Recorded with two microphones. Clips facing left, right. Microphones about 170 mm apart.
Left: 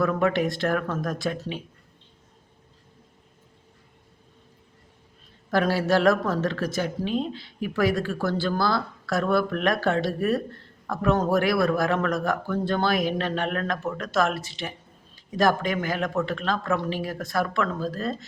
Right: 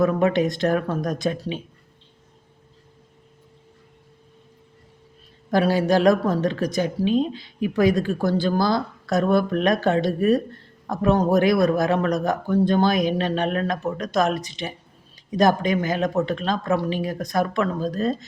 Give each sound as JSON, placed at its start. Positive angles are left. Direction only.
{"t": 0.0, "sound": "a man's voice", "side_deg": -20}
{"t": 5.5, "sound": "a woman's voice", "side_deg": -15}